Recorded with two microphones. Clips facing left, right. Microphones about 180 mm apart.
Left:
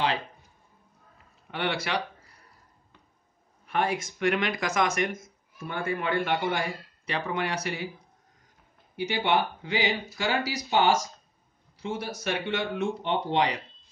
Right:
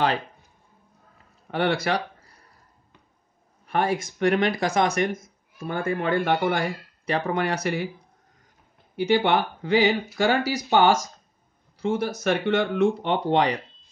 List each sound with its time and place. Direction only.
1.5 s speech: 40° right (ahead or behind)
3.6 s speech: 40° right (ahead or behind)
8.9 s speech: 50° right (ahead or behind)